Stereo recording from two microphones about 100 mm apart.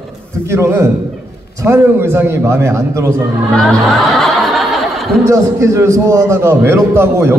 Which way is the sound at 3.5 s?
Centre (ahead or behind).